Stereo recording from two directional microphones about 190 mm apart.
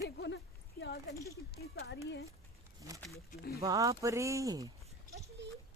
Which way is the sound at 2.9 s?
20° right (ahead or behind).